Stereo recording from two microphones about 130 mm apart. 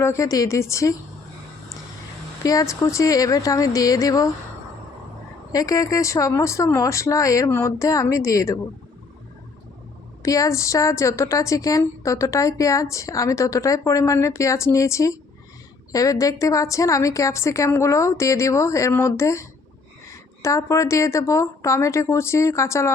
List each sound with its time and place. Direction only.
0.0 s a woman's voice: 25° left (ahead or behind)
2.4 s a woman's voice: 25° left (ahead or behind)
5.5 s a woman's voice: 30° left (ahead or behind)
10.2 s a woman's voice: 25° left (ahead or behind)